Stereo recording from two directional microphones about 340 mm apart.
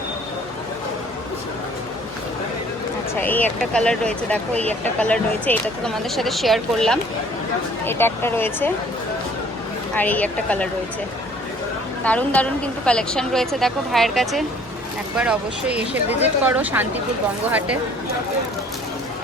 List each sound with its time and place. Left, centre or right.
3.2 s a woman's voice: centre
9.9 s a woman's voice: centre
12.0 s a woman's voice: centre